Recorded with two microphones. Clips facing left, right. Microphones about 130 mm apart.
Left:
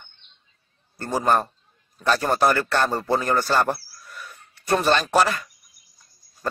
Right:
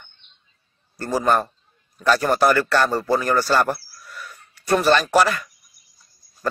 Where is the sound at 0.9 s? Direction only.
25° left (ahead or behind).